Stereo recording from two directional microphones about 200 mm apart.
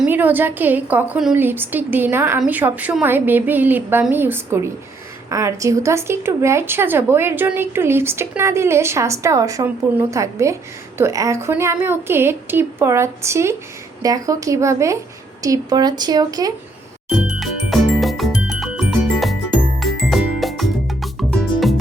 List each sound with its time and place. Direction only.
0.0 s a woman's voice: 10° right (ahead or behind)
17.1 s music: centre (ahead or behind)